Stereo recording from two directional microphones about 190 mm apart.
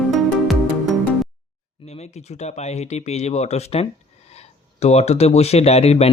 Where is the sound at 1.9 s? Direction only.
35° left (ahead or behind).